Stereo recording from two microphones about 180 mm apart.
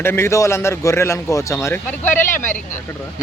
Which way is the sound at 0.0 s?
15° left (ahead or behind).